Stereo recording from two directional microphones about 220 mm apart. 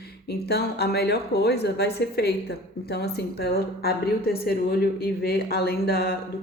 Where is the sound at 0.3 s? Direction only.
45° left (ahead or behind).